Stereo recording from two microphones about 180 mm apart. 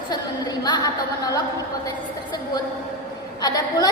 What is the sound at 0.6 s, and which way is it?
Speech, 20° left (ahead or behind).